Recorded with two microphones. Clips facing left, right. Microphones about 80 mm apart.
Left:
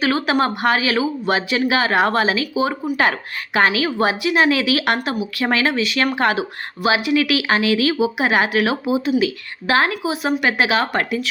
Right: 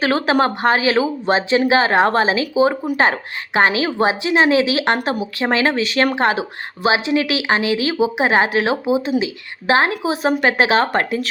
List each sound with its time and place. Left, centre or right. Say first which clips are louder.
0.0 s speech: right 2 dB; right